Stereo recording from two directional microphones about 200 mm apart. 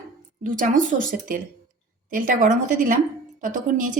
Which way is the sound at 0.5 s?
40° right (ahead or behind).